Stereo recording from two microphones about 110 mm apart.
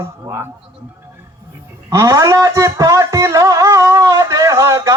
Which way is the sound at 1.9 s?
30° right (ahead or behind).